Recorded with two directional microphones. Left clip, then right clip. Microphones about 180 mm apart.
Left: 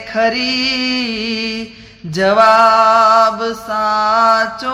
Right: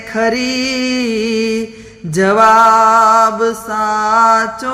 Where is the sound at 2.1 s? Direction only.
15° right (ahead or behind).